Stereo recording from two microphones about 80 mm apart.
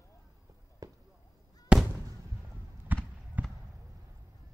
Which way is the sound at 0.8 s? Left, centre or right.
Right.